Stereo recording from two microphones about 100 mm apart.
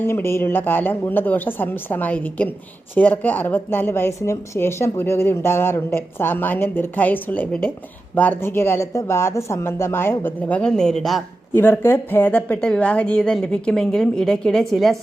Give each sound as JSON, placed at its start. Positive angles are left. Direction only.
{"t": 0.0, "sound": "a woman's voice", "side_deg": 25}
{"t": 10.6, "sound": "a woman's voice", "side_deg": 5}
{"t": 11.5, "sound": "a woman's voice", "side_deg": 25}